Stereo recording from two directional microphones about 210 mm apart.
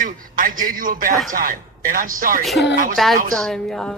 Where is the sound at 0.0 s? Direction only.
40° right (ahead or behind).